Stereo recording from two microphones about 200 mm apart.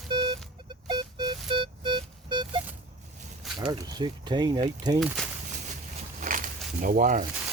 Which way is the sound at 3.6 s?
20° right (ahead or behind).